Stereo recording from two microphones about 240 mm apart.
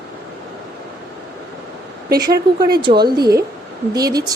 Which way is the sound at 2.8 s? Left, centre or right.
Centre.